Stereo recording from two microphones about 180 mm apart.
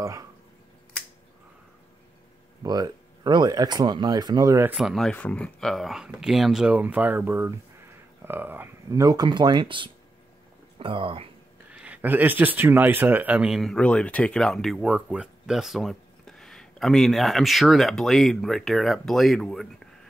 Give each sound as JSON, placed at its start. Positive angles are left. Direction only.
{"t": 0.0, "sound": "speech", "side_deg": -15}
{"t": 2.6, "sound": "speech", "side_deg": -20}
{"t": 4.7, "sound": "speech", "side_deg": 0}
{"t": 11.7, "sound": "speech", "side_deg": -10}